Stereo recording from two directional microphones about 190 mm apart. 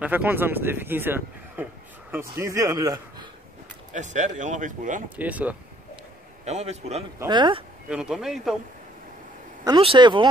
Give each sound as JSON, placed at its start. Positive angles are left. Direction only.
{"t": 0.0, "sound": "a man's voice", "side_deg": -10}
{"t": 3.9, "sound": "speech", "side_deg": -40}
{"t": 5.1, "sound": "speech", "side_deg": -10}
{"t": 6.4, "sound": "speech", "side_deg": -35}
{"t": 7.2, "sound": "speech", "side_deg": -25}
{"t": 7.9, "sound": "speech", "side_deg": -5}
{"t": 9.7, "sound": "speech", "side_deg": -25}